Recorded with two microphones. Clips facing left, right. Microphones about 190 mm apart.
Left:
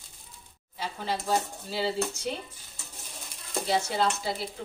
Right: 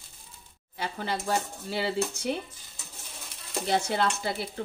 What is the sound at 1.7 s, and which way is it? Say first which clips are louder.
Speech: right 1 dB; 60° right (ahead or behind).